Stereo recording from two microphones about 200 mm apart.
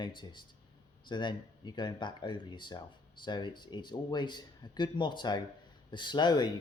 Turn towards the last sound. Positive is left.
turn(degrees=20)  # may be behind; listen again after turning